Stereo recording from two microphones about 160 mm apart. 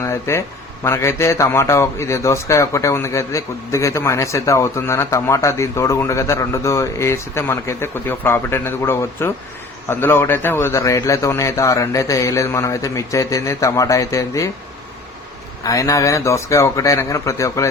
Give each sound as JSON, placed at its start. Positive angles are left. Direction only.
{"t": 0.0, "sound": "a man's voice", "side_deg": 15}
{"t": 15.6, "sound": "a man's voice", "side_deg": 20}